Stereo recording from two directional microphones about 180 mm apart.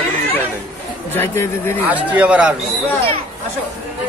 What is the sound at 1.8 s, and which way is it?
Speech, 10° right (ahead or behind).